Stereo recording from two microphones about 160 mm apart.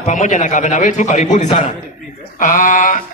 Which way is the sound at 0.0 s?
50° left (ahead or behind).